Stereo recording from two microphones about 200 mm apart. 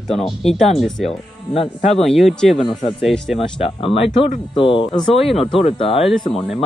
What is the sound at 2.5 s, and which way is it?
Speech, 30° left (ahead or behind).